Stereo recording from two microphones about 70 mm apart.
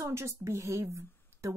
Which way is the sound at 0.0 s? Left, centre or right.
Right.